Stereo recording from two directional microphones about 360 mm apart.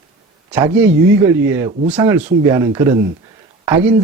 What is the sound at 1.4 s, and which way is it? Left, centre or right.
Speech, centre.